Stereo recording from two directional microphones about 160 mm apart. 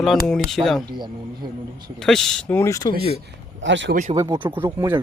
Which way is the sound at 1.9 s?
5° left (ahead or behind).